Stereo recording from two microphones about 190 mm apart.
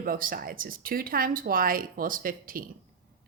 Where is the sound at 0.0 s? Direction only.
50° right (ahead or behind).